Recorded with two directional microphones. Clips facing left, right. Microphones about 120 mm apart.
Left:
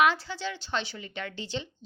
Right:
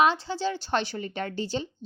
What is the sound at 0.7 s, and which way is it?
Speech, 45° right (ahead or behind).